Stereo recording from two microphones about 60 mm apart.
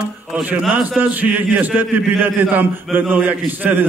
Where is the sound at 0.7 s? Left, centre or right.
Right.